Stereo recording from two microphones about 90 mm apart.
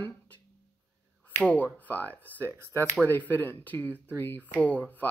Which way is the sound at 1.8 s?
20° left (ahead or behind).